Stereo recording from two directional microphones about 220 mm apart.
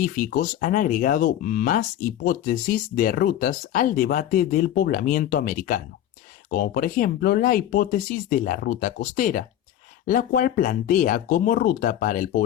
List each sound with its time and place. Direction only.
0.0 s speech: 40° left (ahead or behind)